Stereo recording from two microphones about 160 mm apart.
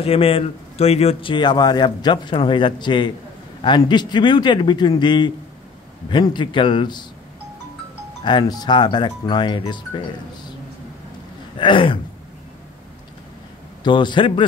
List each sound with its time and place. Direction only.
0.0 s speech: 35° left (ahead or behind)
8.2 s speech: 30° left (ahead or behind)
11.5 s a sound: 30° left (ahead or behind)
13.8 s speech: 30° left (ahead or behind)